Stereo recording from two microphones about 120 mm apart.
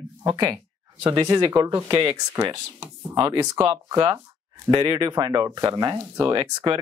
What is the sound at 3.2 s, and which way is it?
Speech, 40° right (ahead or behind).